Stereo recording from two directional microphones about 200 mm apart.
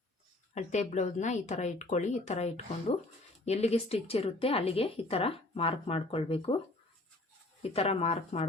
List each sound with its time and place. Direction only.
0.5 s a woman's voice: 35° left (ahead or behind)
7.6 s speech: 30° left (ahead or behind)